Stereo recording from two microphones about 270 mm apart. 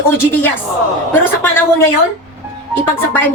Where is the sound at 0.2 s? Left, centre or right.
Centre.